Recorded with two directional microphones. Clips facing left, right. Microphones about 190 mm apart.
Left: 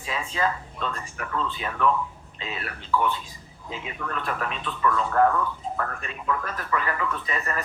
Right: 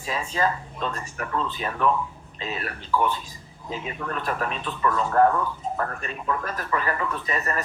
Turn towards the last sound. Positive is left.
turn(degrees=-40)  # may be behind; listen again after turning